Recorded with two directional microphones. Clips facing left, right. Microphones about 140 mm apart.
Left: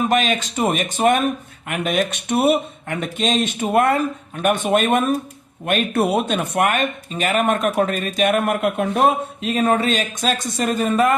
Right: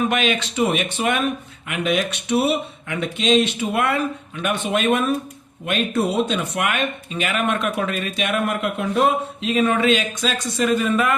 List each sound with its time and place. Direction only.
0.1 s speech: 40° left (ahead or behind)